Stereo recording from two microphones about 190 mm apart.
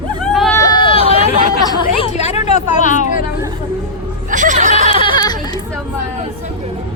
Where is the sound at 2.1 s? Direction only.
35° left (ahead or behind).